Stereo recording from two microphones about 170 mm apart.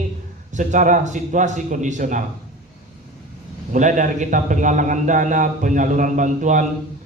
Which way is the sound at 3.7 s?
50° right (ahead or behind).